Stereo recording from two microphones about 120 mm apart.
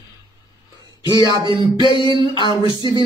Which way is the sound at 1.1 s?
35° left (ahead or behind).